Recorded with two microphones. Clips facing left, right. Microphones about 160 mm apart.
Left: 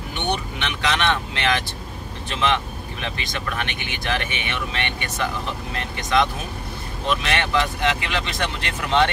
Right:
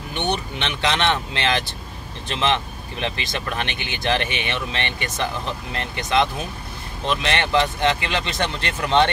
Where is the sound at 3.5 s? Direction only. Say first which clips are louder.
Right 1 dB; 30° right (ahead or behind).